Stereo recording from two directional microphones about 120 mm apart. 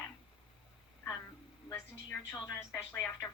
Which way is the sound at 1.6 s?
20° left (ahead or behind).